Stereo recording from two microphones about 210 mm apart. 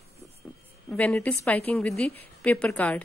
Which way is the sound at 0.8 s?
5° left (ahead or behind).